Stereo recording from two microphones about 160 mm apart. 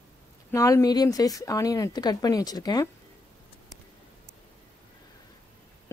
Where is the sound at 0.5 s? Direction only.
20° left (ahead or behind).